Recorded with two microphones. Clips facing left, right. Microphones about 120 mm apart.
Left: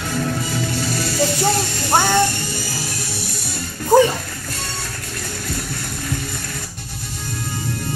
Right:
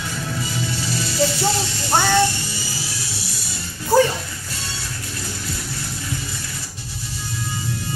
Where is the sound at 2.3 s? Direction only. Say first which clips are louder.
Left 4 dB; 50° left (ahead or behind).